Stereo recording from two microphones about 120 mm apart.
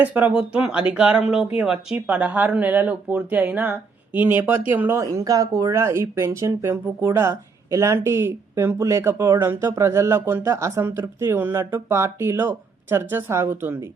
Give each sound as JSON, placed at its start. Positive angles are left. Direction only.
{"t": 0.0, "sound": "speech", "side_deg": -10}